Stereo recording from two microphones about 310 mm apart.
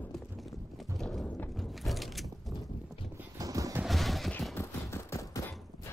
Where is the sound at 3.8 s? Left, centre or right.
Centre.